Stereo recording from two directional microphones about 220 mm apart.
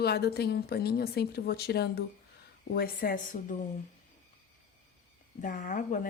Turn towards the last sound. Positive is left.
turn(degrees=35)  # may be behind; listen again after turning